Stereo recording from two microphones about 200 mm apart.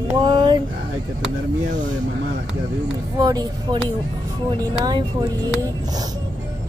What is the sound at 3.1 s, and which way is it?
Speech, 20° right (ahead or behind).